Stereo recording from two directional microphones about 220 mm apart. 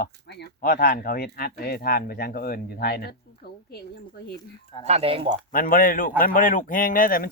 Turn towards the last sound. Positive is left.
turn(degrees=40)  # may be behind; listen again after turning